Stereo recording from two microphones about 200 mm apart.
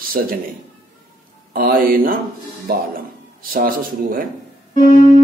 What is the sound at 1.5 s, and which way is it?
Speech, 45° right (ahead or behind).